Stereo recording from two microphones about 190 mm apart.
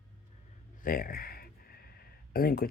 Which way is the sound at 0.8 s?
50° left (ahead or behind).